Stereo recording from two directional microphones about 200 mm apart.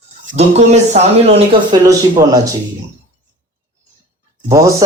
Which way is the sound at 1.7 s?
20° right (ahead or behind).